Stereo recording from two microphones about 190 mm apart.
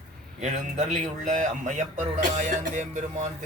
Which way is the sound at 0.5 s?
40° right (ahead or behind).